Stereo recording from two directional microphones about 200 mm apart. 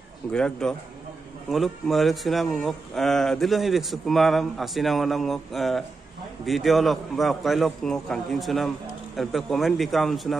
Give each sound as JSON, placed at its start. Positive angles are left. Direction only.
{"t": 0.3, "sound": "a man's voice", "side_deg": 5}